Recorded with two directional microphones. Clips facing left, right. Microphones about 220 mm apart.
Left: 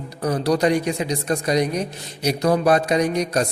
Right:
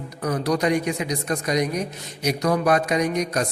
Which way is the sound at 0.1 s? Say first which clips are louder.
Left 3 dB; 30° left (ahead or behind).